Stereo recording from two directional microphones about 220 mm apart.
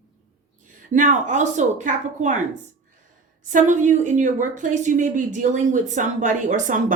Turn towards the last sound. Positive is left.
turn(degrees=-35)  # may be behind; listen again after turning